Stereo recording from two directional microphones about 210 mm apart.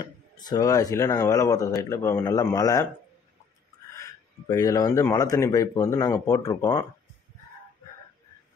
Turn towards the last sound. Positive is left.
turn(degrees=15)  # may be behind; listen again after turning